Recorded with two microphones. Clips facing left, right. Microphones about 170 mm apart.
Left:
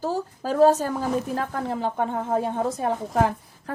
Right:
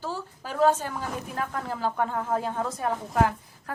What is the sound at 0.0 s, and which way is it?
Speech, 40° left (ahead or behind).